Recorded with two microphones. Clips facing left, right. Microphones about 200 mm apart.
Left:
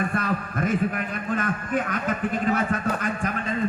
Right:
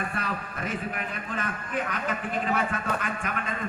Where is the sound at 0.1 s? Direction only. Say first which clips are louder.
Left 6 dB; 45° left (ahead or behind).